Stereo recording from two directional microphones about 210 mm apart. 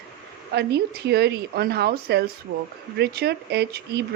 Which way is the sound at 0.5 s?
50° right (ahead or behind).